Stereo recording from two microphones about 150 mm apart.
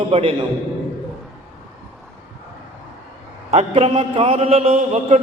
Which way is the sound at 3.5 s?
45° right (ahead or behind).